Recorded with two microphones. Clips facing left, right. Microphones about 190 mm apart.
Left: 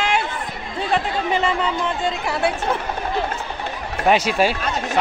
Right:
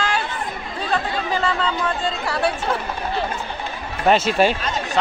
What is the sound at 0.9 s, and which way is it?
Speech, 20° left (ahead or behind).